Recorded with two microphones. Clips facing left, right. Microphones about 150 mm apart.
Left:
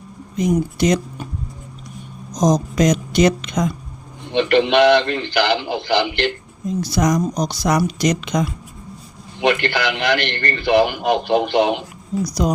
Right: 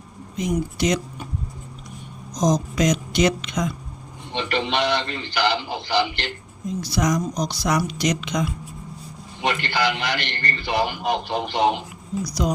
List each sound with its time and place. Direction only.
0.3 s speech: 45° left (ahead or behind)
2.4 s speech: 45° left (ahead or behind)
4.3 s a man's voice: 65° left (ahead or behind)
6.9 s speech: 45° left (ahead or behind)
9.4 s a man's voice: 65° left (ahead or behind)
12.2 s speech: 45° left (ahead or behind)